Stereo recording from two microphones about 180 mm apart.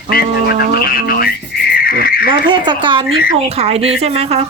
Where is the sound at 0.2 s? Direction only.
60° left (ahead or behind).